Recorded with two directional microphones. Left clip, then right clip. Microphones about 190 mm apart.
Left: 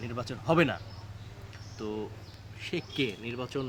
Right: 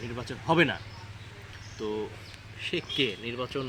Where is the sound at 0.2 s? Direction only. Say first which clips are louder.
Right 2 dB; 25° left (ahead or behind).